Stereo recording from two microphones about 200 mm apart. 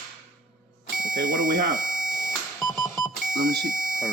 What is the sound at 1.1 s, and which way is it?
Speech, 45° right (ahead or behind).